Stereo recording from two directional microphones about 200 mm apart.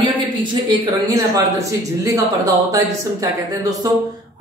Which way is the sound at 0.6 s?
20° right (ahead or behind).